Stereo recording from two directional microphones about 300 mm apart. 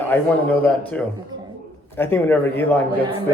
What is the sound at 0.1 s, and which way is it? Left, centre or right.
A man's voice, centre.